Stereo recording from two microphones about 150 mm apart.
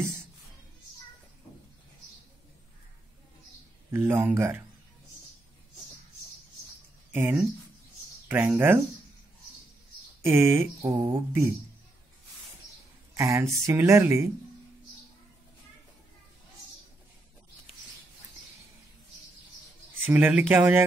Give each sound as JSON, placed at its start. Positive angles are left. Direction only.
{"t": 3.9, "sound": "speech", "side_deg": -15}
{"t": 7.1, "sound": "speech", "side_deg": -15}
{"t": 10.2, "sound": "speech", "side_deg": -15}
{"t": 13.1, "sound": "speech", "side_deg": -20}
{"t": 20.1, "sound": "speech", "side_deg": -10}